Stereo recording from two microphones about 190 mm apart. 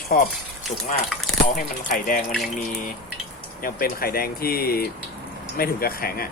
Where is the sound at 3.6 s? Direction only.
50° left (ahead or behind).